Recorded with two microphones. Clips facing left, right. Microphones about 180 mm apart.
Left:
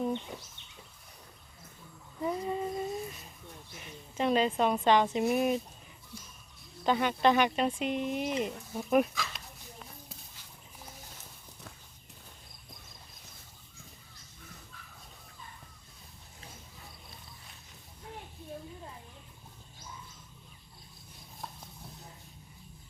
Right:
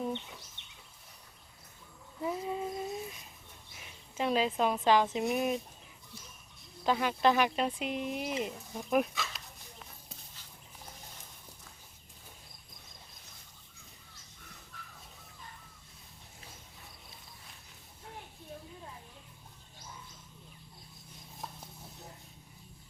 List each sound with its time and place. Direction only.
0.6 s a sound: 70° right (ahead or behind)
2.2 s female singing: 5° right (ahead or behind)
3.8 s speech: centre (ahead or behind)
6.8 s speech: centre (ahead or behind)